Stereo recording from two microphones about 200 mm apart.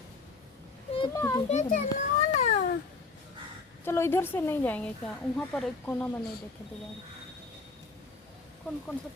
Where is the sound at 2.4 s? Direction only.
40° left (ahead or behind).